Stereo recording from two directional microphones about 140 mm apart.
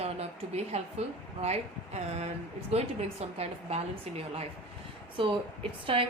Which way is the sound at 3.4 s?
45° right (ahead or behind).